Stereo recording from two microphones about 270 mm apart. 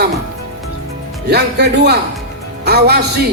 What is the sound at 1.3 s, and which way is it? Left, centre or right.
Speech, right.